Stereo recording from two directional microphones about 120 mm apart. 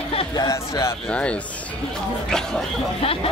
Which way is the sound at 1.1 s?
10° left (ahead or behind).